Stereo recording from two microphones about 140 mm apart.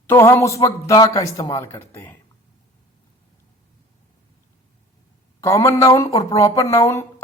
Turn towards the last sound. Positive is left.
turn(degrees=20)  # may be behind; listen again after turning